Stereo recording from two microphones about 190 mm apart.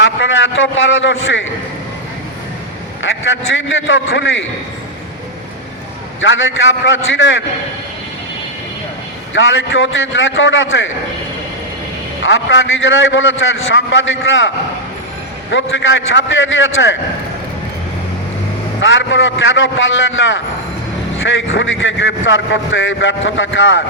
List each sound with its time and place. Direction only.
0.0 s a man's voice: 85° left
3.0 s speech: 80° left
6.1 s speech: 85° left
9.3 s speech: 90° left
12.2 s speech: 80° left
15.7 s speech: 80° left
18.8 s speech: 85° left